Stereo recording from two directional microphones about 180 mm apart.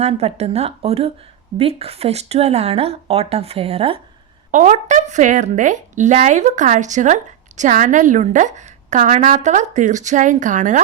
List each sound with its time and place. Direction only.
0.0 s speech: 35° right (ahead or behind)
4.5 s a woman's voice: 45° right (ahead or behind)